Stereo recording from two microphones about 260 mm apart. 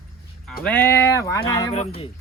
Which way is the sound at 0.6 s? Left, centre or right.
Centre.